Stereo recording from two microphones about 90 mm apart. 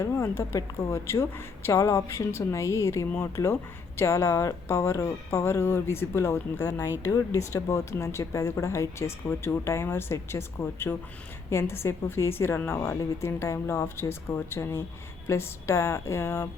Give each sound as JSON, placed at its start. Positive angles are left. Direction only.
{"t": 0.0, "sound": "a woman's voice", "side_deg": 30}